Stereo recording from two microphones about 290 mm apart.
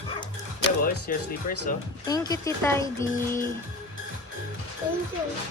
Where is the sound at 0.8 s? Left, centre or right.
Left.